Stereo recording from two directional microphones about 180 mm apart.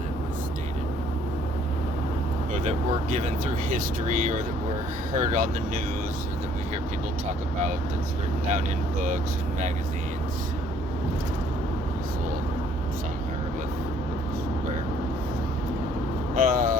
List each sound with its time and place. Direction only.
3.7 s speech: 45° right (ahead or behind)
16.4 s speech: 50° right (ahead or behind)